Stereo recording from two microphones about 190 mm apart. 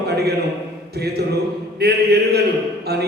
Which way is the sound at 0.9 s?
55° right (ahead or behind).